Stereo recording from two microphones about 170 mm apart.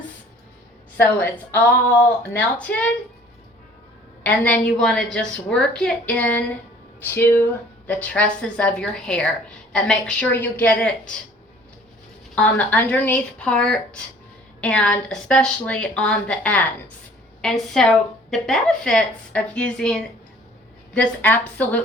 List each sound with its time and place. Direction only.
0.9 s a woman's voice: 10° left (ahead or behind)
4.2 s a woman's voice: 10° left (ahead or behind)
12.3 s a woman's voice: 10° left (ahead or behind)